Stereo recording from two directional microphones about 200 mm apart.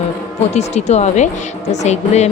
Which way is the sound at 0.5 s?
35° left (ahead or behind).